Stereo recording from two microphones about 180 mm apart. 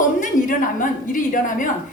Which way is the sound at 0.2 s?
45° left (ahead or behind).